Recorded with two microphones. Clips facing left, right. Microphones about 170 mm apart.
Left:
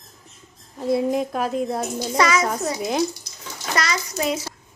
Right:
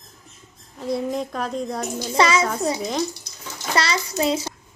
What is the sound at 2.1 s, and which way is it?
Speech, 30° right (ahead or behind).